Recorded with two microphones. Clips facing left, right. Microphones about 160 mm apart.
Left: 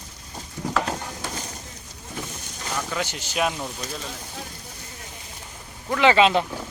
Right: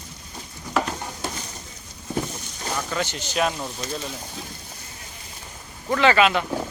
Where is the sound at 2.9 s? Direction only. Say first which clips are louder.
Right 2 dB; 10° left (ahead or behind).